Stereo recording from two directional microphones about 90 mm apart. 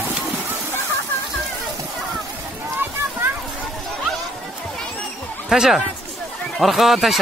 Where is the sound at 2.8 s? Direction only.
25° right (ahead or behind).